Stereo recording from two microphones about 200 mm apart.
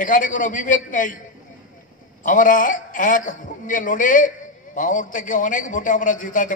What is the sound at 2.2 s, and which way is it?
A man's voice, 40° left (ahead or behind).